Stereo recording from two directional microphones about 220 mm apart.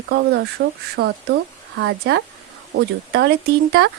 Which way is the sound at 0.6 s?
45° right (ahead or behind).